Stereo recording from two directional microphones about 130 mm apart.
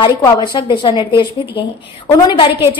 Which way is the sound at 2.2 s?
40° left (ahead or behind).